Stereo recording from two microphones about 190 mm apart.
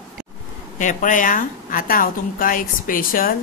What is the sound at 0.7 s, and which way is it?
A woman's voice, 40° left (ahead or behind).